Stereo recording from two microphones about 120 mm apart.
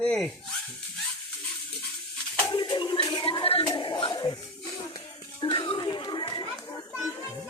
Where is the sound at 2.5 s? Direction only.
45° left (ahead or behind).